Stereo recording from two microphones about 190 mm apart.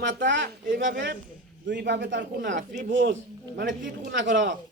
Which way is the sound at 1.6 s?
65° right (ahead or behind).